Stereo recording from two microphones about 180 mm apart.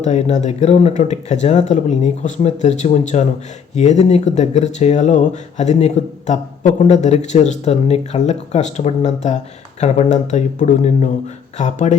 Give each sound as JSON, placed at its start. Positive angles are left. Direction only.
{"t": 0.0, "sound": "speech", "side_deg": 40}